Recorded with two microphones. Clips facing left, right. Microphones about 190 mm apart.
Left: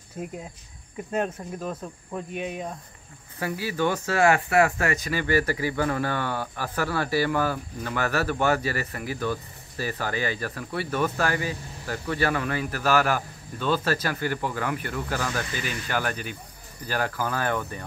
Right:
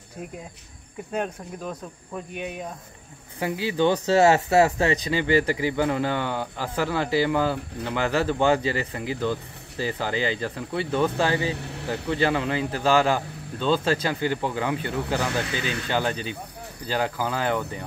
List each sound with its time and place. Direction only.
1.1 s speech: 5° left (ahead or behind)
3.3 s speech: 20° right (ahead or behind)
11.5 s speech: 70° right (ahead or behind)
12.1 s speech: 20° right (ahead or behind)
15.3 s speech: 65° right (ahead or behind)
15.9 s speech: 20° right (ahead or behind)